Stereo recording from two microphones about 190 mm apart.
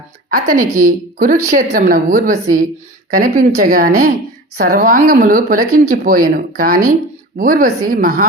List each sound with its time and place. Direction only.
0.3 s speech: 50° right (ahead or behind)